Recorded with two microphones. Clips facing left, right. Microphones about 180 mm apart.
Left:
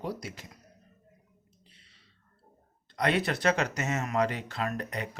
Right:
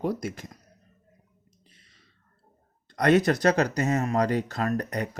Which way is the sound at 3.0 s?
45° right (ahead or behind).